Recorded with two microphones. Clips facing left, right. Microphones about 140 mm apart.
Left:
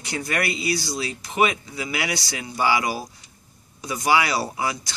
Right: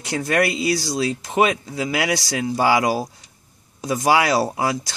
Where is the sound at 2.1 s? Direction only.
90° right.